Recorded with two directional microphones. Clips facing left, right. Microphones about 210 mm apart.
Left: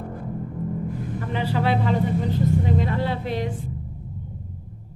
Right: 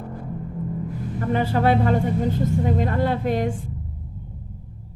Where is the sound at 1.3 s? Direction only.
45° right (ahead or behind).